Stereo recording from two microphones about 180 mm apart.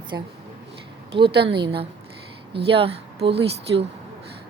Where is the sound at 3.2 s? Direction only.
70° right (ahead or behind).